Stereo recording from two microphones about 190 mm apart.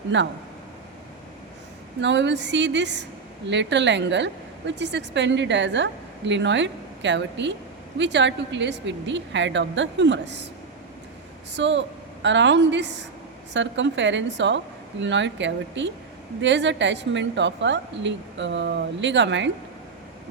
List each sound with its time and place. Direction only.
0.1 s speech: 70° right (ahead or behind)
2.0 s speech: 70° right (ahead or behind)
11.5 s speech: 70° right (ahead or behind)